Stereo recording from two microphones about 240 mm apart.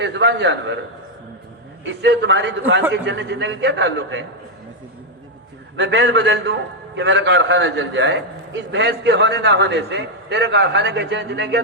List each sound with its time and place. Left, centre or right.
0.0 s a man's voice: right
1.8 s a man's voice: right
5.7 s a man's voice: right